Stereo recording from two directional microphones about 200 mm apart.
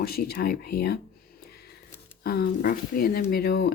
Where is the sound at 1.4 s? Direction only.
50° left (ahead or behind).